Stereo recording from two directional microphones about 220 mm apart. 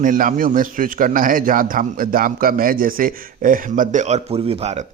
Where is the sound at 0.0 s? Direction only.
35° right (ahead or behind).